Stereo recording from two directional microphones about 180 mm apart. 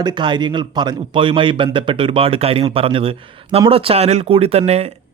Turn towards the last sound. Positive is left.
turn(degrees=-35)  # may be behind; listen again after turning